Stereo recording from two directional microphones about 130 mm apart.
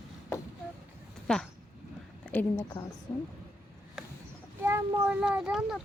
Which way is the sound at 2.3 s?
15° left (ahead or behind).